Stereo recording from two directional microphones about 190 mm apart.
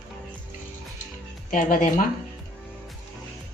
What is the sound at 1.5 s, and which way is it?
Speech, 45° left (ahead or behind).